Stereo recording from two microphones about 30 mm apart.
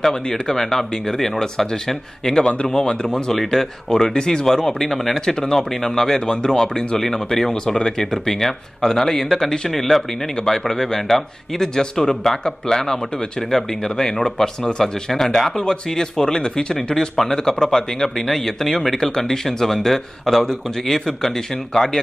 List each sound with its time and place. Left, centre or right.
0.1 s speech: centre
3.3 s speech: centre
4.1 s speech: left
7.0 s speech: centre
15.1 s speech: centre
17.3 s speech: centre
18.9 s speech: centre